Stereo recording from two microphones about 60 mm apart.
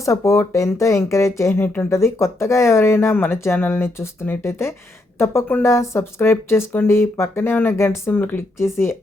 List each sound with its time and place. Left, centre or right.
0.0 s speech: left
1.6 s speech: left
1.9 s speech: left
8.1 s speech: left
8.5 s speech: left